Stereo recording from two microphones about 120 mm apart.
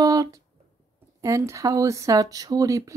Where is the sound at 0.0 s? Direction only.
30° right (ahead or behind).